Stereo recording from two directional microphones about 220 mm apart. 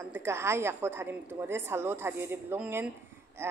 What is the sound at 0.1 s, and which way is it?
A woman's voice, 10° right (ahead or behind).